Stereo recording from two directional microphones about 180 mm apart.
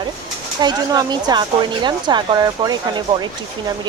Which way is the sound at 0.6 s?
20° right (ahead or behind).